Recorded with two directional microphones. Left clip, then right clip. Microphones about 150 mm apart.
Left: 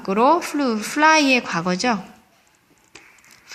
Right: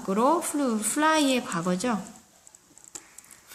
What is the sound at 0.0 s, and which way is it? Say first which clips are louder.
A woman's voice: left 7 dB; 25° left (ahead or behind).